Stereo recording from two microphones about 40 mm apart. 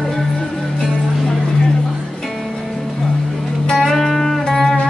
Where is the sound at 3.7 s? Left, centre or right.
Centre.